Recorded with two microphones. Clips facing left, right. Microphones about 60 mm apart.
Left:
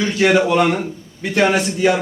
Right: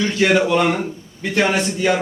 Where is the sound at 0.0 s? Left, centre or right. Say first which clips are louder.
Left 1 dB; centre.